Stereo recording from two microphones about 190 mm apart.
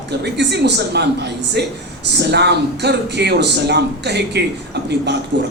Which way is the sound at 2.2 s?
60° right (ahead or behind).